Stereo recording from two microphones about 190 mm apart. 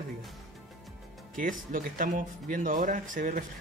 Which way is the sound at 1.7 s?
45° right (ahead or behind).